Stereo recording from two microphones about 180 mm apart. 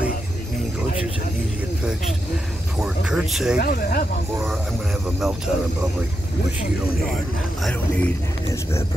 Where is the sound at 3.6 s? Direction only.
55° left (ahead or behind).